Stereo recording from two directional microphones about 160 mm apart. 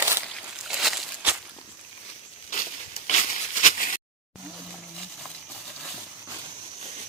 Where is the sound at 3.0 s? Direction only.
50° left (ahead or behind).